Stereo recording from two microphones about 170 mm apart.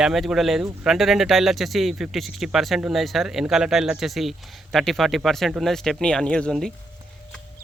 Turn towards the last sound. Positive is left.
turn(degrees=5)  # may be behind; listen again after turning